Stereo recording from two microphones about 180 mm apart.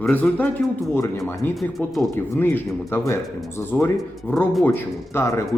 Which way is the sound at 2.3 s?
10° left (ahead or behind).